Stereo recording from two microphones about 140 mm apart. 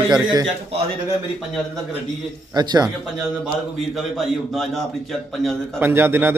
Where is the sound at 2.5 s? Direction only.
30° right (ahead or behind).